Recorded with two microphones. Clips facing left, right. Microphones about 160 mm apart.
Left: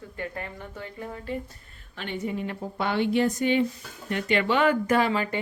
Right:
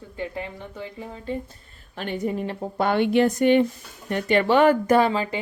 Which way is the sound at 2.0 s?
45° right (ahead or behind).